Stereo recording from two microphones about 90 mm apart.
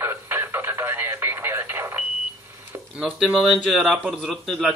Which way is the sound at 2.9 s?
5° right (ahead or behind).